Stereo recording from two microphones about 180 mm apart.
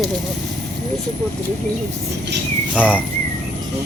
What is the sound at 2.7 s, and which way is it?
Insect, 5° right (ahead or behind).